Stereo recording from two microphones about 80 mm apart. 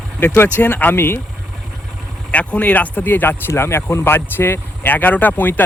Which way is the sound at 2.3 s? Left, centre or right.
Centre.